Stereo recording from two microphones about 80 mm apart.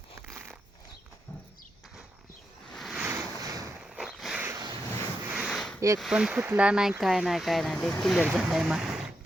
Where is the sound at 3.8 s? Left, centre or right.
Centre.